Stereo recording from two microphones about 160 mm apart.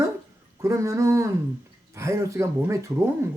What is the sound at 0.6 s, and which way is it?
Speech, 20° right (ahead or behind).